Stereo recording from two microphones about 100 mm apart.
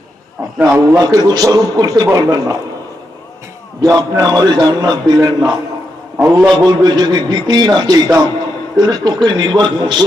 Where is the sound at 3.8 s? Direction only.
45° right (ahead or behind).